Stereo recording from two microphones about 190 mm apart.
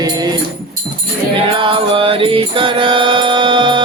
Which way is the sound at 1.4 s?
25° right (ahead or behind).